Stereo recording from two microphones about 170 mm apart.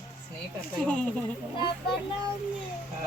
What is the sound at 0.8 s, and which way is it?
Speech, 5° left (ahead or behind).